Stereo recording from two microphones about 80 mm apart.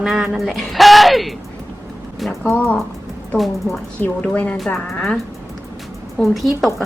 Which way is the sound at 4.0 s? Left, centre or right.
Centre.